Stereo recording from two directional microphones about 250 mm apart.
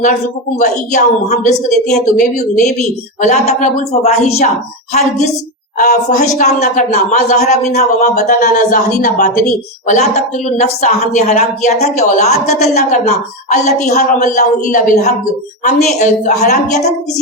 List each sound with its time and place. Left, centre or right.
0.6 s a woman's voice: left
7.7 s a woman's voice: left